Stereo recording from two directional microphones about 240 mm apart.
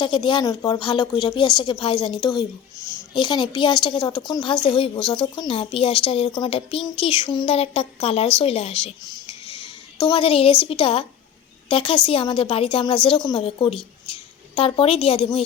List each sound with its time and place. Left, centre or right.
0.0 s a woman's voice: centre